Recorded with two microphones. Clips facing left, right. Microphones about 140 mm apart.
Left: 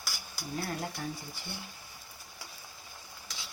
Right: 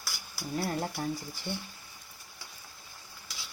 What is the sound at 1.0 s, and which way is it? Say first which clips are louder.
Speech: right 5 dB; 30° right (ahead or behind).